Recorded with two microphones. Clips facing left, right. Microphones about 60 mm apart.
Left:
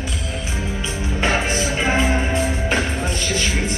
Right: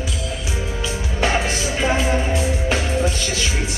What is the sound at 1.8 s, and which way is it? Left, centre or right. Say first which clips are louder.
Music: right 1 dB; left.